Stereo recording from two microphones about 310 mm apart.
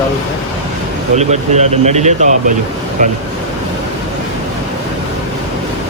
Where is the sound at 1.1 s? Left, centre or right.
Right.